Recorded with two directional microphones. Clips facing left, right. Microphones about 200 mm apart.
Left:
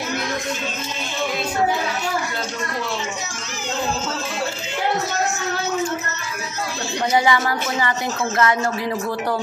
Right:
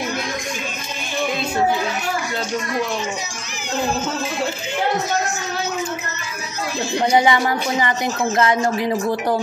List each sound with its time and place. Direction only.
7.1 s speech: 20° right (ahead or behind)